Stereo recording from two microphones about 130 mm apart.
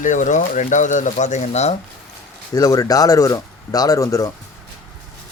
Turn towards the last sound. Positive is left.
turn(degrees=25)  # may be behind; listen again after turning